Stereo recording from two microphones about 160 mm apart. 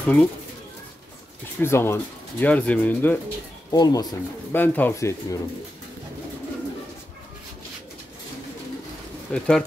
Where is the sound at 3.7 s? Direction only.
25° left (ahead or behind).